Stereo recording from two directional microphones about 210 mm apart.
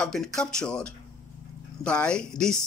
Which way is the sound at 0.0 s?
5° left (ahead or behind).